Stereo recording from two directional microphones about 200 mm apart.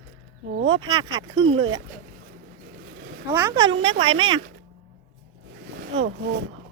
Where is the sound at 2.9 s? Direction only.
60° right (ahead or behind).